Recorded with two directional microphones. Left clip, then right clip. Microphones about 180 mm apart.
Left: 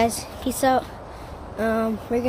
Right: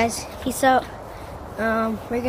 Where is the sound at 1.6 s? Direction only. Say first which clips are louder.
Right 1 dB; 30° left (ahead or behind).